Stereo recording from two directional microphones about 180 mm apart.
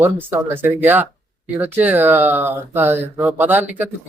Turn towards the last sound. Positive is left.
turn(degrees=-10)  # may be behind; listen again after turning